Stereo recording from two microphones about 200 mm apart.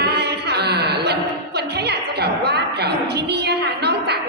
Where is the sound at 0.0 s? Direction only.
55° right (ahead or behind).